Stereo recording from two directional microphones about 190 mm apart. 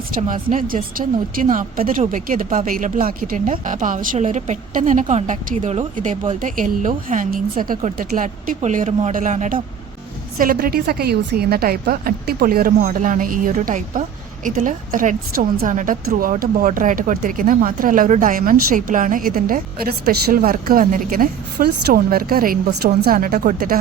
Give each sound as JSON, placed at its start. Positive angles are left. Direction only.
{"t": 0.2, "sound": "speech", "side_deg": -45}